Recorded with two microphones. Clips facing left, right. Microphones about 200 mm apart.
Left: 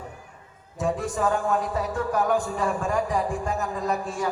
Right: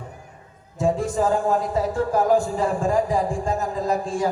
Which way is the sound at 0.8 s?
25° right (ahead or behind).